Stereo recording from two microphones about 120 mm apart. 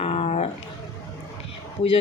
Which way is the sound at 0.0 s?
55° left (ahead or behind).